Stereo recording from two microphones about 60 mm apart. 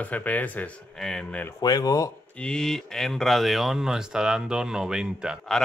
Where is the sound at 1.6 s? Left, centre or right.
Left.